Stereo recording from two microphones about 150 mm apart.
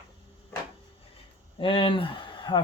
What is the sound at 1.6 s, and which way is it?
Speech, 35° left (ahead or behind).